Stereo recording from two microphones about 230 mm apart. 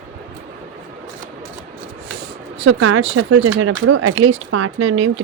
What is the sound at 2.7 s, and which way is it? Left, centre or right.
Speech, right.